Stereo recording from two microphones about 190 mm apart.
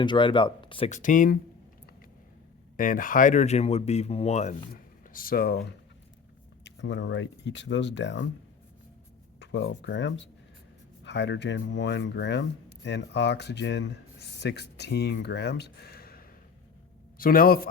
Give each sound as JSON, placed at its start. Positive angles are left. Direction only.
{"t": 0.0, "sound": "speech", "side_deg": 25}
{"t": 0.9, "sound": "speech", "side_deg": 40}
{"t": 2.7, "sound": "speech", "side_deg": 45}
{"t": 4.7, "sound": "speech", "side_deg": 50}
{"t": 6.7, "sound": "speech", "side_deg": 70}
{"t": 9.4, "sound": "speech", "side_deg": 70}